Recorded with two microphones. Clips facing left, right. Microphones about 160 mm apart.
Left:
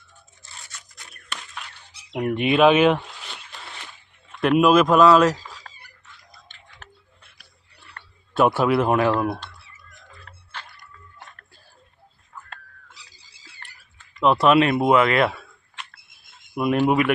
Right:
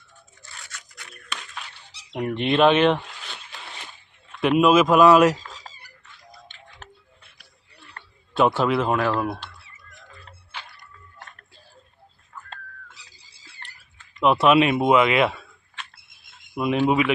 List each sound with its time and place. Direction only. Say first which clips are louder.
2.1 s speech: left 1 dB; 5° left (ahead or behind)
5.0 s speech: right 1 dB; 15° right (ahead or behind)
5.7 s a sound: right 2 dB; 25° right (ahead or behind)
8.4 s speech: left 3 dB; 10° left (ahead or behind)
9.2 s speech: left 3 dB; centre (ahead or behind)
14.2 s speech: even; 5° right (ahead or behind)
15.4 s a sound: even; 5° left (ahead or behind)
16.6 s speech: left 1 dB; 5° left (ahead or behind)